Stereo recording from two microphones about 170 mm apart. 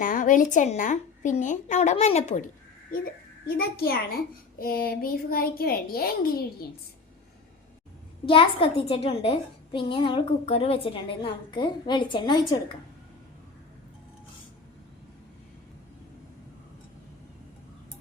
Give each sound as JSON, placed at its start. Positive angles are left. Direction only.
{"t": 0.0, "sound": "a woman's voice", "side_deg": 50}
{"t": 3.4, "sound": "a child's voice", "side_deg": 65}
{"t": 8.3, "sound": "a woman's voice", "side_deg": 30}